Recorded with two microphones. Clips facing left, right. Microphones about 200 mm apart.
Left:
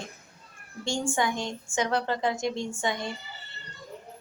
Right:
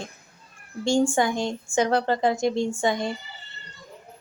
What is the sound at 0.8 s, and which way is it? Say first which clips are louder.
A woman's voice: right 7 dB; 35° right (ahead or behind).